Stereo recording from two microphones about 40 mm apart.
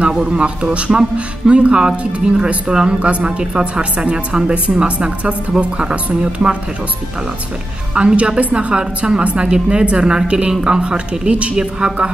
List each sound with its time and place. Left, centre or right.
0.1 s speech: right
7.9 s speech: right